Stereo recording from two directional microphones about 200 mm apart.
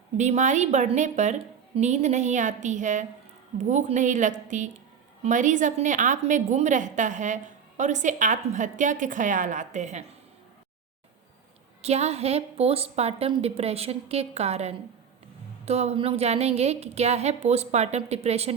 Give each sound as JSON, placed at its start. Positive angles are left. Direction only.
{"t": 0.2, "sound": "a woman's voice", "side_deg": -35}
{"t": 11.8, "sound": "a woman's voice", "side_deg": -30}